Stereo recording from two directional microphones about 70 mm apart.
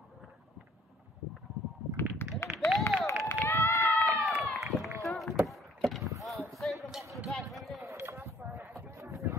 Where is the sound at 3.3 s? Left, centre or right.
Left.